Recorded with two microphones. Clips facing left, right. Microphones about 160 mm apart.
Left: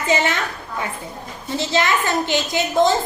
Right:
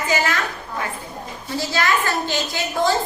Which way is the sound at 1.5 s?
20° left (ahead or behind).